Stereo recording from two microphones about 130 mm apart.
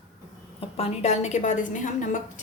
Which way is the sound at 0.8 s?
55° left (ahead or behind).